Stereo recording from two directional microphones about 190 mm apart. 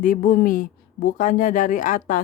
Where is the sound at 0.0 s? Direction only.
45° left (ahead or behind).